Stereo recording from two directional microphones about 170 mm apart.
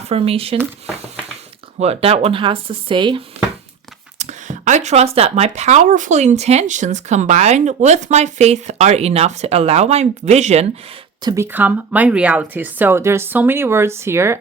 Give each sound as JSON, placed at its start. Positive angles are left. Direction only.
{"t": 0.0, "sound": "speech", "side_deg": -35}
{"t": 1.8, "sound": "speech", "side_deg": -35}
{"t": 4.2, "sound": "speech", "side_deg": -45}
{"t": 11.2, "sound": "speech", "side_deg": -25}
{"t": 11.5, "sound": "speech", "side_deg": -10}